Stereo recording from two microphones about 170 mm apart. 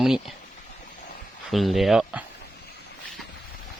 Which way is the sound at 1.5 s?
Centre (ahead or behind).